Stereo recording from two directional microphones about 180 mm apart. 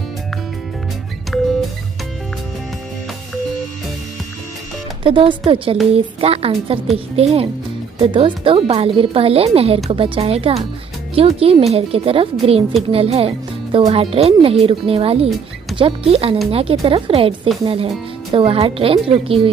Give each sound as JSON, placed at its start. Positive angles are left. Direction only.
{"t": 1.3, "sound": "music", "side_deg": 5}
{"t": 5.0, "sound": "speech", "side_deg": -30}
{"t": 18.3, "sound": "speech", "side_deg": -30}